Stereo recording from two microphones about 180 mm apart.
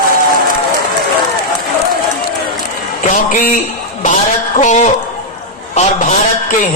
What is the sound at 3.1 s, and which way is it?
Speech, 45° left (ahead or behind).